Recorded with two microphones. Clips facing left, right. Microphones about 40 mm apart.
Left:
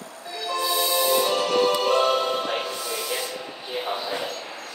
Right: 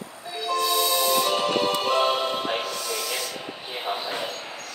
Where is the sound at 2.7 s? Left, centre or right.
Centre.